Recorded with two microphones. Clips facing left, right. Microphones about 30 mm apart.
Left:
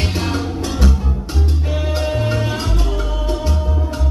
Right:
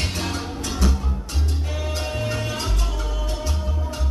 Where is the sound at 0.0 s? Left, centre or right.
Left.